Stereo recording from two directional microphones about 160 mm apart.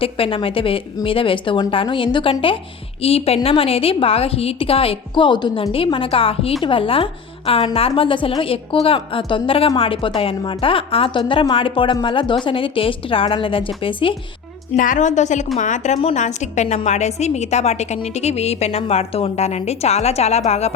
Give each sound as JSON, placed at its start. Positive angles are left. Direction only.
{"t": 0.0, "sound": "a woman's voice", "side_deg": 35}
{"t": 14.8, "sound": "a woman's voice", "side_deg": 55}